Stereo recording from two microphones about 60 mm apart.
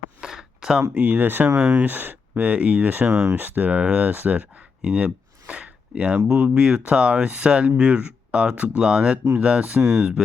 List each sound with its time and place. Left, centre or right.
0.2 s a sound: centre
0.8 s speech: right
1.5 s speech: centre
1.8 s speech: right; by 9.7 s centre
9.7 s speech: right